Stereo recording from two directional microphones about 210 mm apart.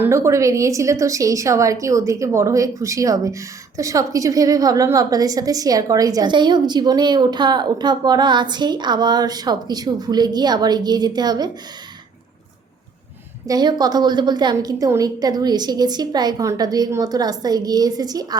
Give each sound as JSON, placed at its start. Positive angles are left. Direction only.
{"t": 0.0, "sound": "a woman's voice", "side_deg": -15}
{"t": 13.5, "sound": "a woman's voice", "side_deg": -20}